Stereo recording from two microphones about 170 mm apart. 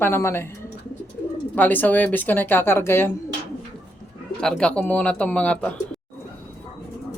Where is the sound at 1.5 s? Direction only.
10° left (ahead or behind).